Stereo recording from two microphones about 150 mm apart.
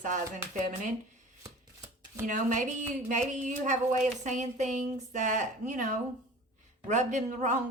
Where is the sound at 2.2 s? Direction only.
60° right (ahead or behind).